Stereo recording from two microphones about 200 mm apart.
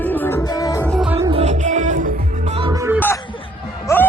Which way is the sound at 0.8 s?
Centre (ahead or behind).